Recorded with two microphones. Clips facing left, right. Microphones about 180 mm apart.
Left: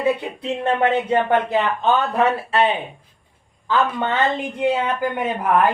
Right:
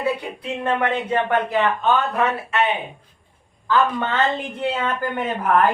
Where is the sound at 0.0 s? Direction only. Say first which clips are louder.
Left 3 dB; 25° left (ahead or behind).